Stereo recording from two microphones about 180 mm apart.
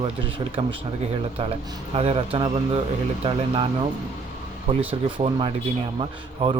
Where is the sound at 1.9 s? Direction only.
35° right (ahead or behind).